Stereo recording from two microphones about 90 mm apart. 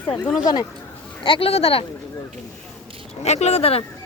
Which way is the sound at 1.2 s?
85° left.